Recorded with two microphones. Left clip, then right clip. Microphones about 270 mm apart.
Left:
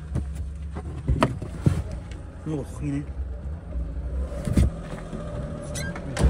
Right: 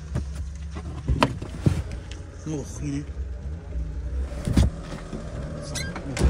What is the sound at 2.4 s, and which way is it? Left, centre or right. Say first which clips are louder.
Speech: left 1 dB; centre.